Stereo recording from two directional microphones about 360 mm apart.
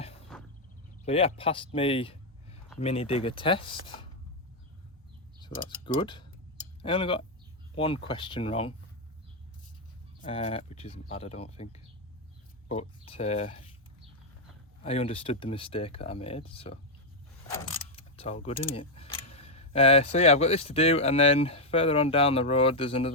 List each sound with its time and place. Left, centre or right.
1.0 s speech: centre
5.4 s speech: centre
10.2 s speech: centre
14.8 s speech: centre